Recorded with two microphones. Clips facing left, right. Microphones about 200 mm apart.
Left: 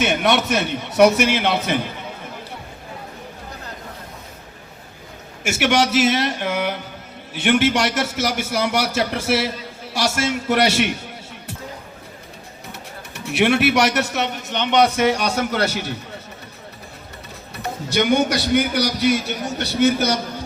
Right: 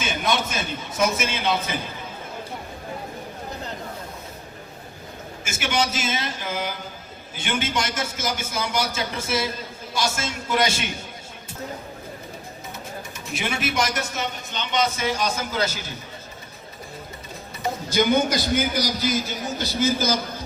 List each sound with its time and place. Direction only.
0.0 s a man's voice: 70° left (ahead or behind)
5.5 s a man's voice: 70° left (ahead or behind)
13.1 s a man's voice: 75° left (ahead or behind)
17.5 s a man's voice: 70° left (ahead or behind)